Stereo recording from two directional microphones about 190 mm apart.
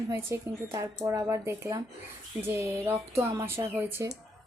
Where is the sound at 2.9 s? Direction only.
15° right (ahead or behind).